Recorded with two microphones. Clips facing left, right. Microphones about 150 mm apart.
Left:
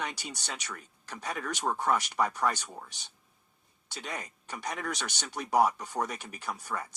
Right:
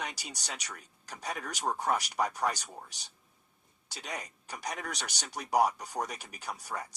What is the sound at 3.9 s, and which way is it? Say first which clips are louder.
Speech: left 2 dB; 40° right (ahead or behind).